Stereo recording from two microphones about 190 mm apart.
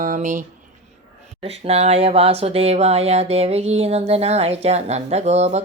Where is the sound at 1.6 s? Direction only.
35° right (ahead or behind).